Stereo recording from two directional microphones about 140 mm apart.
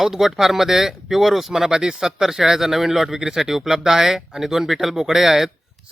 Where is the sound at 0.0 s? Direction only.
Centre (ahead or behind).